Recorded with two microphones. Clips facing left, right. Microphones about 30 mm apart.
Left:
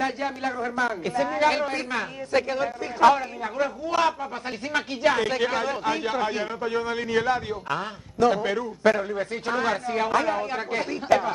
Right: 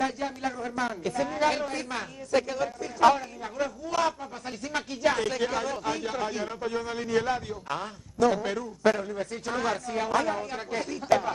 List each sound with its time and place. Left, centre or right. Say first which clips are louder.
0.0 s a man's voice: left 3 dB; left